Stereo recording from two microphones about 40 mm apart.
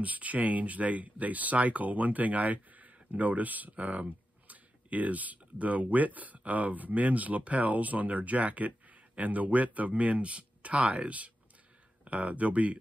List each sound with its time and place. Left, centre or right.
0.0 s speech: right